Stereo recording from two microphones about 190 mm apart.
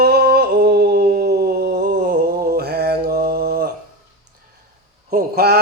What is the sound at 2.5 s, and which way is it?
Mantra, 55° right (ahead or behind).